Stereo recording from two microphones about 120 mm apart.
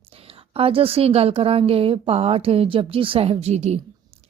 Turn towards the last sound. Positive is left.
turn(degrees=-65)  # may be behind; listen again after turning